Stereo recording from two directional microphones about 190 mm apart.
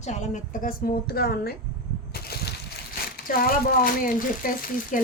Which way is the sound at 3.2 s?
50° left (ahead or behind).